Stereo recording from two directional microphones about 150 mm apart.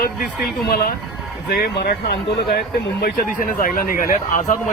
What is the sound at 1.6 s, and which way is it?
Speech, 90° left.